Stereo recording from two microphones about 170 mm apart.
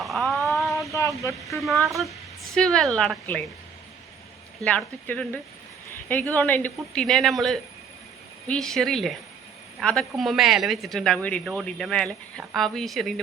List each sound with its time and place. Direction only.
0.0 s a sound: centre (ahead or behind)
0.9 s speech: 20° left (ahead or behind)
1.6 s a woman's voice: centre (ahead or behind)
4.6 s a woman's voice: 5° left (ahead or behind)